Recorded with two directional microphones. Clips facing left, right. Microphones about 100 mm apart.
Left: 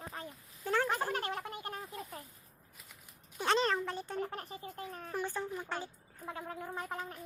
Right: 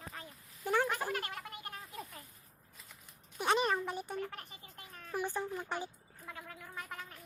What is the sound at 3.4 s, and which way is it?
Speech, 15° right (ahead or behind).